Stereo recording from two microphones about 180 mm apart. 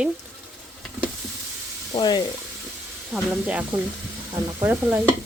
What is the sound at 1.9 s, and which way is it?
Speech, 25° left (ahead or behind).